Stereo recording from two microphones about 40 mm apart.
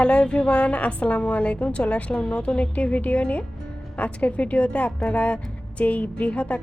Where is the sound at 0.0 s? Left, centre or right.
Left.